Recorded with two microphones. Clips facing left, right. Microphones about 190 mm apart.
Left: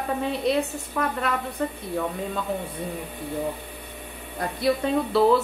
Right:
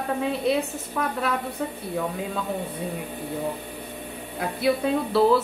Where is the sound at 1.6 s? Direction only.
5° right (ahead or behind).